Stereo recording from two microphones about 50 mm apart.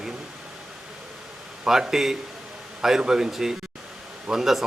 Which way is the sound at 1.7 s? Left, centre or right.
Centre.